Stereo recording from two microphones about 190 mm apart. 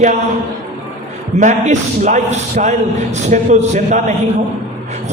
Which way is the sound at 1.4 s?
40° right (ahead or behind).